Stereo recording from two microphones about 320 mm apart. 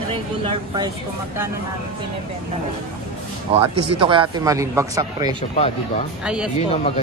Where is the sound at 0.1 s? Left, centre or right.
Centre.